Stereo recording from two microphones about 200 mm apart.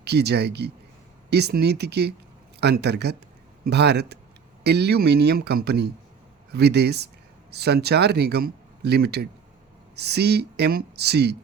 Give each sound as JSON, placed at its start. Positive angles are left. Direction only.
{"t": 0.0, "sound": "speech", "side_deg": -55}